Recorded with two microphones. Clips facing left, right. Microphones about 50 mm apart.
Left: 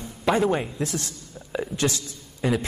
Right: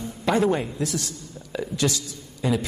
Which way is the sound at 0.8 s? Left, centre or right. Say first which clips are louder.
Right 1 dB; left.